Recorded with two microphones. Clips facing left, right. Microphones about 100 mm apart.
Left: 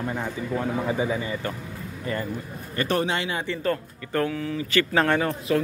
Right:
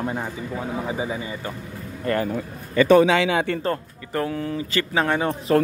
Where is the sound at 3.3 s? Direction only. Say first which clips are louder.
Right 7 dB; 60° right (ahead or behind).